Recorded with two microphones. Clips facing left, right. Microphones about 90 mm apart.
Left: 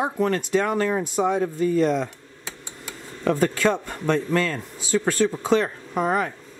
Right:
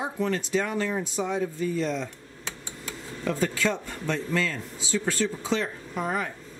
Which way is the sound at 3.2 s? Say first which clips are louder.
Left 6 dB; 50° left (ahead or behind).